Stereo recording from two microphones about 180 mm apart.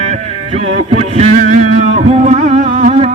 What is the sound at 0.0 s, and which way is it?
Music, 35° right (ahead or behind).